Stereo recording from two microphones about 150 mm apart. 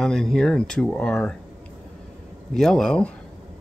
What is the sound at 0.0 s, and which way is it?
Speech, 5° left (ahead or behind).